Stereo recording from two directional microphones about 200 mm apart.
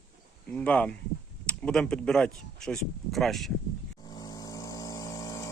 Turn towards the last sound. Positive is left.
turn(degrees=15)  # may be behind; listen again after turning